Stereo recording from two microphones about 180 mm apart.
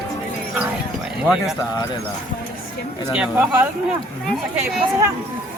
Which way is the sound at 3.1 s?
5° right (ahead or behind).